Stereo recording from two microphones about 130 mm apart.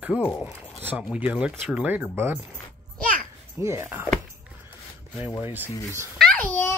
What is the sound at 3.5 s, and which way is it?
Speech, 20° right (ahead or behind).